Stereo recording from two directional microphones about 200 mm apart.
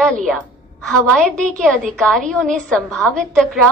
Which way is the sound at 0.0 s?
5° left (ahead or behind).